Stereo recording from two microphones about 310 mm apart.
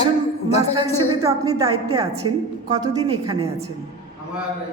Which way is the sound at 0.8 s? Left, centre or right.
Centre.